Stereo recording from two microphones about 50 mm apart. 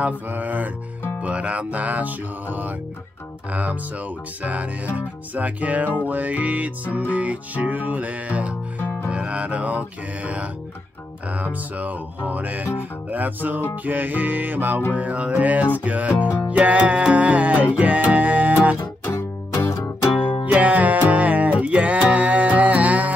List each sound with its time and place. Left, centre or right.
0.0 s music: right
1.2 s music: right
4.4 s music: right
19.7 s music: left
20.5 s music: right